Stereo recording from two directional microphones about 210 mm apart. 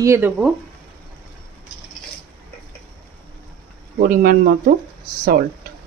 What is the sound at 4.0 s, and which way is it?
Speech, 40° right (ahead or behind).